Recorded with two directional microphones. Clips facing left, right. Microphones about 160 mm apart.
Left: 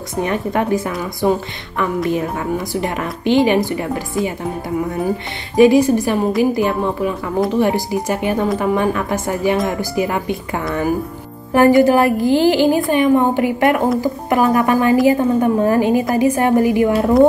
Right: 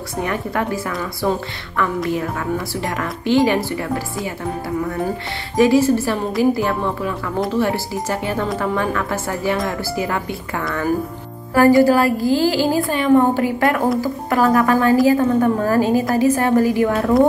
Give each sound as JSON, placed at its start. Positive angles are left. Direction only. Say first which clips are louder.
{"t": 0.1, "sound": "a woman's voice", "louder": "left 4 dB", "side_deg": 20}